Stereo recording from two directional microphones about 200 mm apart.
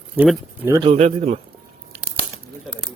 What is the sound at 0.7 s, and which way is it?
Speech, 25° right (ahead or behind).